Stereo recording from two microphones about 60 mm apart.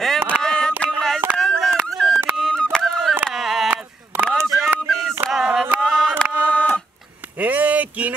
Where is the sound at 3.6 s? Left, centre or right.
Right.